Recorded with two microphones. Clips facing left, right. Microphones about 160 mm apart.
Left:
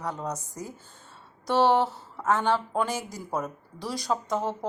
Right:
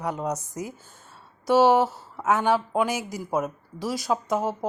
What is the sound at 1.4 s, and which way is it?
A woman's voice, 5° right (ahead or behind).